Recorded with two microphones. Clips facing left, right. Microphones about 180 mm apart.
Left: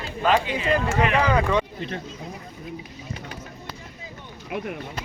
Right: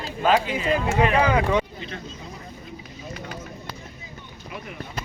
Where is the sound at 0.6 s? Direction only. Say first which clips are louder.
Right 1 dB; 35° right (ahead or behind).